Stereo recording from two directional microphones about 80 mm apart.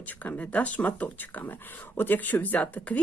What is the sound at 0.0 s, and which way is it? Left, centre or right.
Speech, centre.